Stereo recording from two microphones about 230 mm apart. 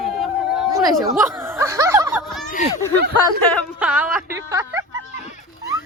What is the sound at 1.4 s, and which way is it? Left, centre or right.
Snicker, centre.